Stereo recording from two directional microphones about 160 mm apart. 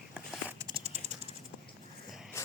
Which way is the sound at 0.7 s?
40° right (ahead or behind).